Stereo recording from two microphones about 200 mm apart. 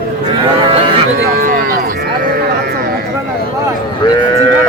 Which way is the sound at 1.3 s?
45° right (ahead or behind).